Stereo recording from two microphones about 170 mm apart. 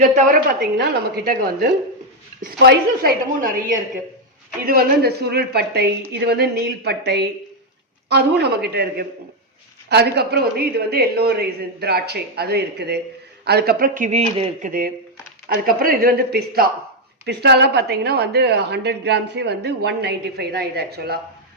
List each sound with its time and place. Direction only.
0.0 s a woman's voice: 50° right (ahead or behind)
4.6 s a woman's voice: 60° right (ahead or behind); by 14.7 s 35° right (ahead or behind)
14.7 s a woman's voice: 60° right (ahead or behind)
17.2 s a woman's voice: 80° right